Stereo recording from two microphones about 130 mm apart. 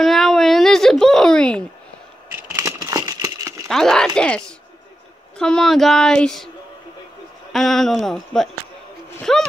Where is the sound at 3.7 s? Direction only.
5° left (ahead or behind).